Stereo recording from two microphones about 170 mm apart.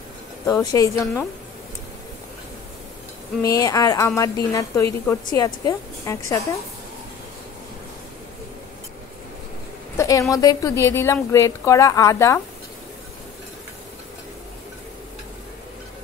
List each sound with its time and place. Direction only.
0.5 s speech: 20° left (ahead or behind)
3.4 s a woman's voice: 20° left (ahead or behind)
9.9 s a sound: 20° left (ahead or behind)
10.3 s a woman's voice: 20° left (ahead or behind)